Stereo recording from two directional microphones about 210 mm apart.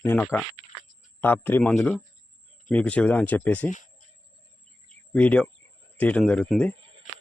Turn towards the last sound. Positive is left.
turn(degrees=5)  # may be behind; listen again after turning